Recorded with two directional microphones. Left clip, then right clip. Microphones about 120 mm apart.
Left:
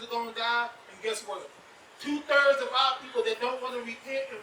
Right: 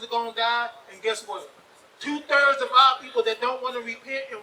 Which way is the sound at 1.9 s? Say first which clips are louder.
Right 3 dB; 25° right (ahead or behind).